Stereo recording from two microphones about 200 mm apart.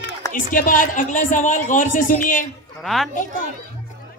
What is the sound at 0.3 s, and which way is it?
A woman's voice, 45° left (ahead or behind).